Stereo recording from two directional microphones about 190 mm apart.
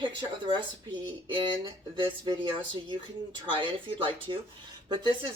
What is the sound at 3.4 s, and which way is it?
Speech, 25° right (ahead or behind).